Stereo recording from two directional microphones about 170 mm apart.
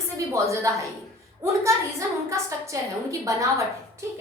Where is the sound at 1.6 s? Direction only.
15° right (ahead or behind).